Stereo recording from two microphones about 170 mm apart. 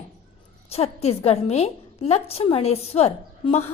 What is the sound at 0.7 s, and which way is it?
A woman's voice, 35° left (ahead or behind).